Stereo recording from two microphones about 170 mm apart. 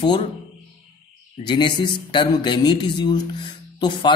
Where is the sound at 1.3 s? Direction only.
25° left (ahead or behind).